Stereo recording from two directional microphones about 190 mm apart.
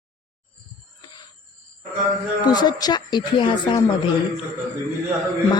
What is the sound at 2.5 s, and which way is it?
A man's voice, 20° left (ahead or behind).